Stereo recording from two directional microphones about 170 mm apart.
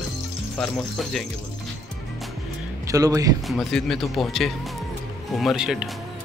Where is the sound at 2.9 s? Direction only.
20° right (ahead or behind).